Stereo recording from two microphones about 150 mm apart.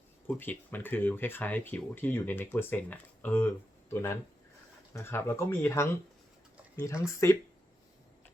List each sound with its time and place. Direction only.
0.3 s speech: 10° left (ahead or behind)